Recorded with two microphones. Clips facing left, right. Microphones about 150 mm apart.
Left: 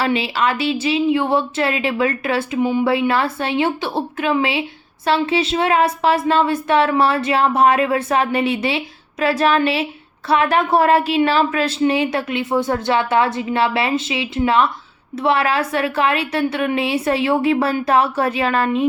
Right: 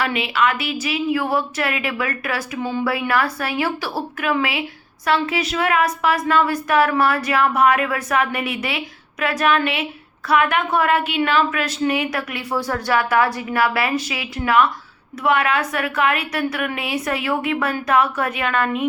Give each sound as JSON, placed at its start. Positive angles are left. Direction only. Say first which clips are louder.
{"t": 0.0, "sound": "speech", "louder": "left 2 dB", "side_deg": 30}